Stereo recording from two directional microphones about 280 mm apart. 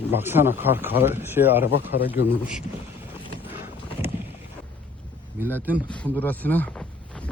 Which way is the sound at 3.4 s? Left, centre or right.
Centre.